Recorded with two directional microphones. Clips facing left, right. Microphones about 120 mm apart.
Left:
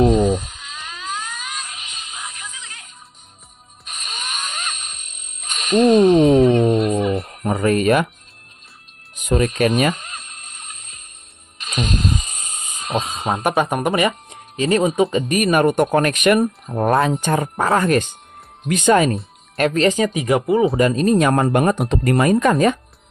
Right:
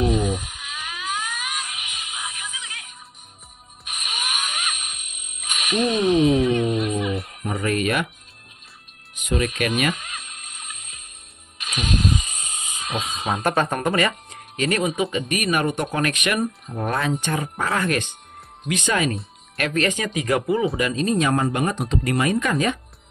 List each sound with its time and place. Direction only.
0.2 s music: 10° right (ahead or behind)
5.9 s a sound: 40° left (ahead or behind)
7.5 s speech: 35° left (ahead or behind)
9.1 s speech: 40° left (ahead or behind)
12.3 s hiss: 45° left (ahead or behind)
12.9 s speech: 25° left (ahead or behind)
13.4 s speech: 15° left (ahead or behind); by 19.1 s 45° left (ahead or behind)
19.5 s speech: 35° left (ahead or behind)
20.8 s speech: 50° left (ahead or behind)